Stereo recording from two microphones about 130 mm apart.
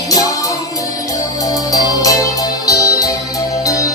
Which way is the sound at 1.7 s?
25° left (ahead or behind).